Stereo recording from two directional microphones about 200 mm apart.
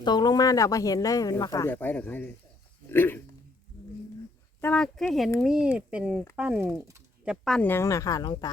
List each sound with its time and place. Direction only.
0.0 s speech: 20° left (ahead or behind)
4.6 s speech: 5° left (ahead or behind); by 7.0 s 15° right (ahead or behind)
7.3 s speech: centre (ahead or behind); by 8.4 s 20° left (ahead or behind)